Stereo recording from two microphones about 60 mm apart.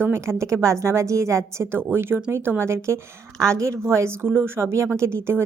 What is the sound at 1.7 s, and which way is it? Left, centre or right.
Speech, right.